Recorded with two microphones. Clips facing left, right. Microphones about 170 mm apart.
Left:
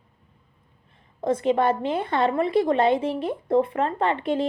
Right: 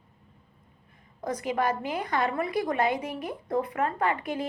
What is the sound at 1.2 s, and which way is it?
A woman's voice, 25° left (ahead or behind).